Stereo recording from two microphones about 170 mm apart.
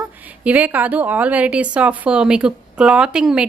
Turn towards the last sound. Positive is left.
turn(degrees=-5)  # may be behind; listen again after turning